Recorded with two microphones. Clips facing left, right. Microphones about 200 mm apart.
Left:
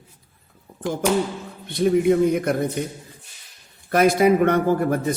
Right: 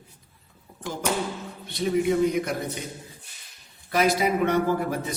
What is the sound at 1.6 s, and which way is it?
A man's voice, 55° left (ahead or behind).